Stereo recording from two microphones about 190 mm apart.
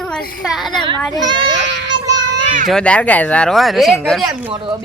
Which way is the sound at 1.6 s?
70° right (ahead or behind).